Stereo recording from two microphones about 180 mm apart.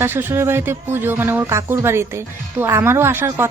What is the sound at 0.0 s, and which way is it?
Speech, 10° right (ahead or behind).